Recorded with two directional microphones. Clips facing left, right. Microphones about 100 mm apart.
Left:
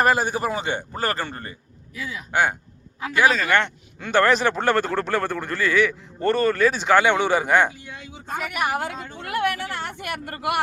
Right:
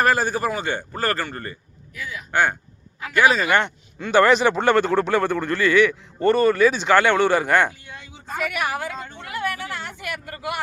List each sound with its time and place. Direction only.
0.0 s a man's voice: 20° left (ahead or behind)
3.2 s a man's voice: 10° right (ahead or behind); by 7.7 s 10° left (ahead or behind)
8.8 s speech: 55° left (ahead or behind)